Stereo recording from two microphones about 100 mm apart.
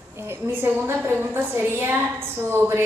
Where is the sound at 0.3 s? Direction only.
20° right (ahead or behind).